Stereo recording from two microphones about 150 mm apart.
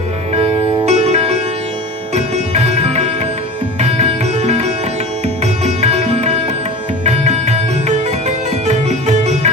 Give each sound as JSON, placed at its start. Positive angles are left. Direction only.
{"t": 0.3, "sound": "music", "side_deg": -40}
{"t": 8.6, "sound": "sitar", "side_deg": -50}